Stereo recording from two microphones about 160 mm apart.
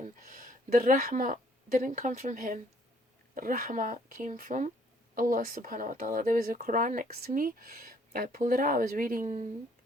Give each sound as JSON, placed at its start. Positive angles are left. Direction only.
{"t": 0.3, "sound": "a woman's voice", "side_deg": -60}
{"t": 3.3, "sound": "speech", "side_deg": -65}